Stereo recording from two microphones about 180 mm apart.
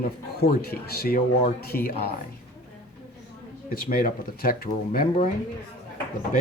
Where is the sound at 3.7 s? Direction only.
55° left (ahead or behind).